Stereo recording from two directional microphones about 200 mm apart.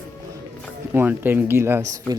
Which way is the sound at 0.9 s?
10° right (ahead or behind).